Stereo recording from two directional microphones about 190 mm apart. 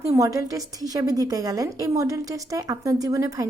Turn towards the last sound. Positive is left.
turn(degrees=-15)  # may be behind; listen again after turning